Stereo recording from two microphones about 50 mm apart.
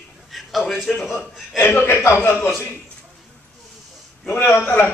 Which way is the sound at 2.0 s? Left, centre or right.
Left.